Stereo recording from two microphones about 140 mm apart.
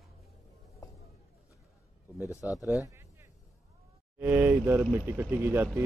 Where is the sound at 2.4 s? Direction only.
10° right (ahead or behind).